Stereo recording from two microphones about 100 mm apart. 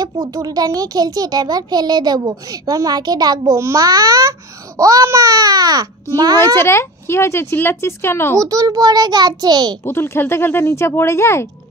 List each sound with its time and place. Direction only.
0.0 s a child's voice: 40° right (ahead or behind)
6.4 s speech: 25° left (ahead or behind)
8.4 s a child's voice: 40° right (ahead or behind)
9.8 s speech: 25° left (ahead or behind)